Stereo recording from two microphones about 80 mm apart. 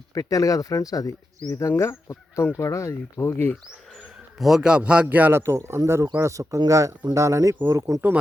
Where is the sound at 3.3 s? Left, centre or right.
Left.